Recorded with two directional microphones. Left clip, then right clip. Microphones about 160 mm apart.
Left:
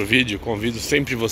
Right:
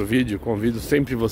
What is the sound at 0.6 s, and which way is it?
Speech, 55° right (ahead or behind).